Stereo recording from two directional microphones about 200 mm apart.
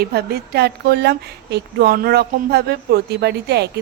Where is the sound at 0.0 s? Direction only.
55° right (ahead or behind).